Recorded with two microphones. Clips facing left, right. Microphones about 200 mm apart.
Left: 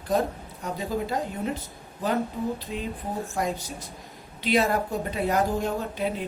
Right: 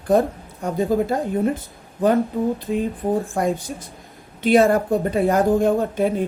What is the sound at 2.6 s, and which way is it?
Speech, 50° right (ahead or behind).